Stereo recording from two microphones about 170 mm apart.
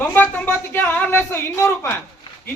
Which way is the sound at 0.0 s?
10° left (ahead or behind).